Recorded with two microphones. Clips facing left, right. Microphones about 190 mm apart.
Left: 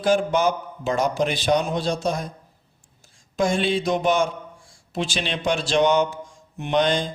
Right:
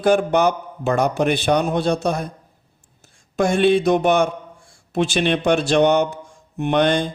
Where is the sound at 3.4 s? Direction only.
60° right (ahead or behind).